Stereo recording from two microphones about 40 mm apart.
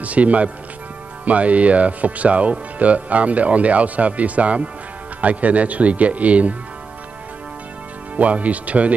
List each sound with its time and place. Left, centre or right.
0.0 s speech: right
8.2 s speech: right